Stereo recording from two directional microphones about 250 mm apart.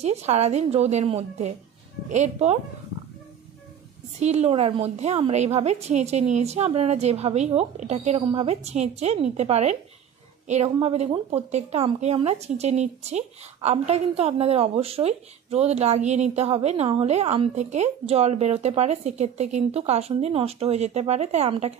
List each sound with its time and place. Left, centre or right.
0.0 s a woman's voice: right
4.2 s a woman's voice: right